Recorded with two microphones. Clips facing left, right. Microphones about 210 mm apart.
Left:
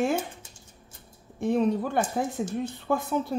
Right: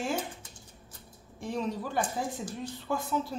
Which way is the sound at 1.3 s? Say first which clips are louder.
Left 9 dB; 55° left (ahead or behind).